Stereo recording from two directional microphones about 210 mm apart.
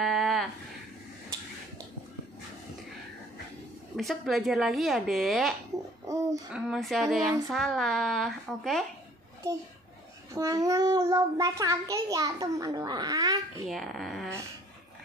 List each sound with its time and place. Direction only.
0.0 s a sound: centre (ahead or behind)
3.9 s speech: centre (ahead or behind)
6.5 s speech: centre (ahead or behind)
10.3 s a child's voice: 15° right (ahead or behind)
13.7 s speech: centre (ahead or behind)